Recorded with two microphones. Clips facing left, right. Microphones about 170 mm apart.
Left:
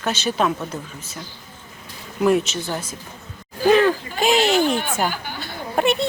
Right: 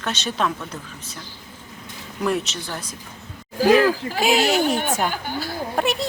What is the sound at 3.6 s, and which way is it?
Speech, 5° right (ahead or behind).